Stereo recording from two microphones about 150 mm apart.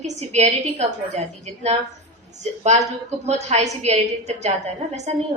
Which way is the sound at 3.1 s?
50° right (ahead or behind).